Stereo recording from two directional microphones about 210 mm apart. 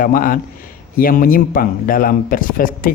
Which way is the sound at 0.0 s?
40° left (ahead or behind).